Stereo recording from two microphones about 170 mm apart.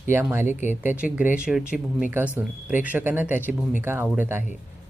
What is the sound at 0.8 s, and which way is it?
Speech, 10° right (ahead or behind).